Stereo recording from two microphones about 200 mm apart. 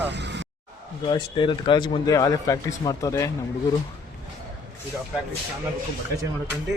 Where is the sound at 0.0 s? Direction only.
60° right (ahead or behind).